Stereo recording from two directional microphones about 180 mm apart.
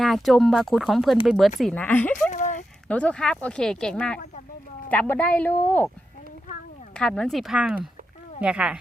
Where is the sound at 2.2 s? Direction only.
45° left (ahead or behind).